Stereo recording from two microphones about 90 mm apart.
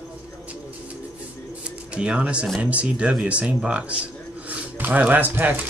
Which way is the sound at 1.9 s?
10° right (ahead or behind).